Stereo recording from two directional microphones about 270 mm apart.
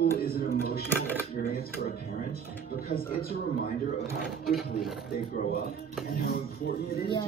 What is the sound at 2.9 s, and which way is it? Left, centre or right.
Speech, left.